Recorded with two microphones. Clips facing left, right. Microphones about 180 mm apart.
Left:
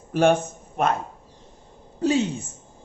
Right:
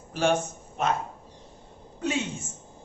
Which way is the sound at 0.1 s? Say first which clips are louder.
Left 6 dB; 55° left (ahead or behind).